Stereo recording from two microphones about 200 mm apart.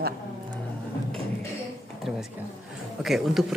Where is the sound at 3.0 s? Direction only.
Centre (ahead or behind).